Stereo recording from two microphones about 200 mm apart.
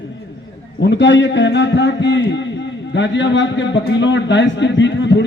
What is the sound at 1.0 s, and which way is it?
A man's voice, 65° left (ahead or behind).